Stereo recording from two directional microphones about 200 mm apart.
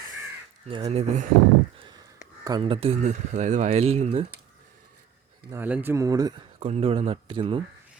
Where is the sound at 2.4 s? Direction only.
25° right (ahead or behind).